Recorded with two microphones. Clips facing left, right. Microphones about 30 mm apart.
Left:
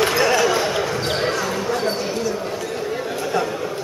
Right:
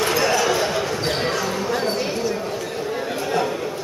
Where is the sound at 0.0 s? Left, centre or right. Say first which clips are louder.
Left 2 dB; centre.